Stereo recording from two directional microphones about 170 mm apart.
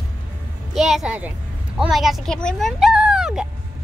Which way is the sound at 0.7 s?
Centre (ahead or behind).